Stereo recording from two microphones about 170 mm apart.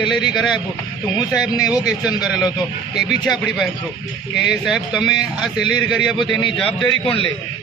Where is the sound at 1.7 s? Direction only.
5° right (ahead or behind).